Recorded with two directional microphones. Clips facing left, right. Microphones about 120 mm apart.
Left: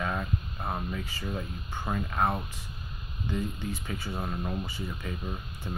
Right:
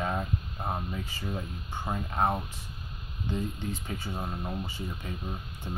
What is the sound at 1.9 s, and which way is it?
Speech, 25° right (ahead or behind).